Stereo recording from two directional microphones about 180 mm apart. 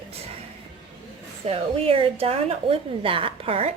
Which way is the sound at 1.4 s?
35° right (ahead or behind).